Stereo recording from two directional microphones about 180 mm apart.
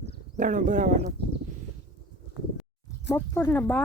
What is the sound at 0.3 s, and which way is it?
Speech, 45° right (ahead or behind).